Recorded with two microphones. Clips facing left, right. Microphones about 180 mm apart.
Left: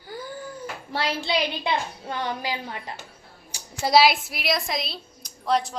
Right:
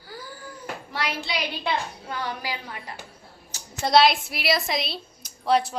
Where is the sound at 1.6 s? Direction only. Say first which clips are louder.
Left 1 dB; 25° left (ahead or behind).